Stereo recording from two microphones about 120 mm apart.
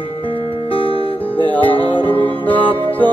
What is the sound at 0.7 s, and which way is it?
Music, 50° left (ahead or behind).